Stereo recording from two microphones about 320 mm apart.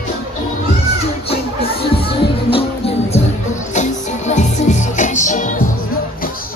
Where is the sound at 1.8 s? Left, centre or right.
Centre.